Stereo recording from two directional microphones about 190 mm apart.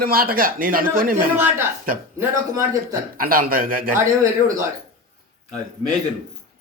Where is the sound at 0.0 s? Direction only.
50° right (ahead or behind).